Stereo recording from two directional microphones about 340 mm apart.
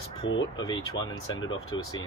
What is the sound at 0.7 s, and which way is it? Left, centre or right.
Speech, left.